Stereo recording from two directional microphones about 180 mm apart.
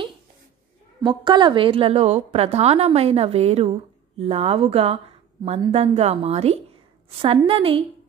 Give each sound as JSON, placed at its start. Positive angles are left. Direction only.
{"t": 1.0, "sound": "a woman's voice", "side_deg": -25}